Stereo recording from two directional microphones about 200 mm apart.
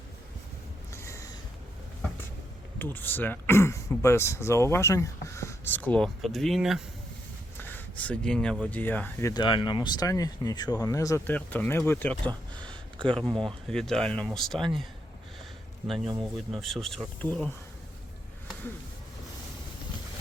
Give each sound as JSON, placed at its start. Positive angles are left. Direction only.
{"t": 0.9, "sound": "a sound", "side_deg": 15}
{"t": 2.7, "sound": "speech", "side_deg": 10}
{"t": 7.6, "sound": "speech", "side_deg": 10}
{"t": 9.3, "sound": "speech", "side_deg": 25}
{"t": 16.1, "sound": "speech", "side_deg": 0}